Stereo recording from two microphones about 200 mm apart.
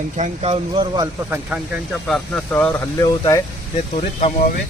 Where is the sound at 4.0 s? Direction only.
30° left (ahead or behind).